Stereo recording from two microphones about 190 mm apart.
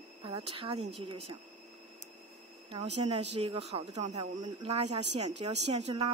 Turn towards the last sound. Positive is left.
turn(degrees=-35)  # may be behind; listen again after turning